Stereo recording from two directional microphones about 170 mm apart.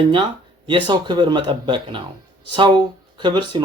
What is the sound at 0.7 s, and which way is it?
Speech, 30° right (ahead or behind).